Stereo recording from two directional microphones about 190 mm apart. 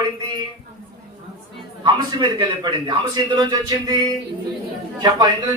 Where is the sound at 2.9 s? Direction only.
25° right (ahead or behind).